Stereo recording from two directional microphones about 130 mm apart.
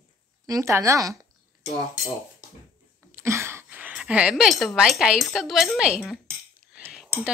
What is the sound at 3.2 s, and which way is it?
Speech, 20° right (ahead or behind).